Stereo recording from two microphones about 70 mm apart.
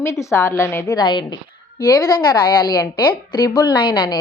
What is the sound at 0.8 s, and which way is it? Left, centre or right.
A woman's voice, left.